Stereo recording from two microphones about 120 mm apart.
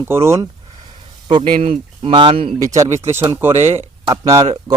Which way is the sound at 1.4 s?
50° right (ahead or behind).